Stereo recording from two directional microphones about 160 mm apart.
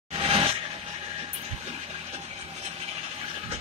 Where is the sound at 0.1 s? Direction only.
35° right (ahead or behind).